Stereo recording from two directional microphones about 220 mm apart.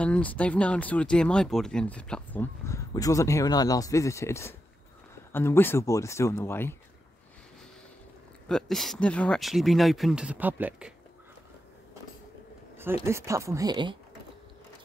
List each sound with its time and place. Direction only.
0.0 s speech: 5° left (ahead or behind)
8.5 s speech: centre (ahead or behind)
13.0 s speech: 10° right (ahead or behind)